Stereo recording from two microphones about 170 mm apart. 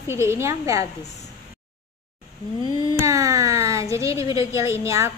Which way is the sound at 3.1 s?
20° right (ahead or behind).